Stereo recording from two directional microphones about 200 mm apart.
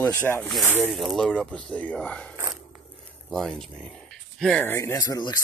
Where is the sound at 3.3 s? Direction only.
5° left (ahead or behind); by 5.3 s 20° left (ahead or behind).